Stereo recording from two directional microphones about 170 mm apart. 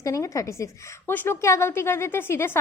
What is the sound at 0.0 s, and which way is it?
A woman's voice, 20° left (ahead or behind).